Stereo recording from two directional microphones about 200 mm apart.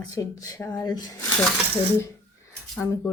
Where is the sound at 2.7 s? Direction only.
10° left (ahead or behind).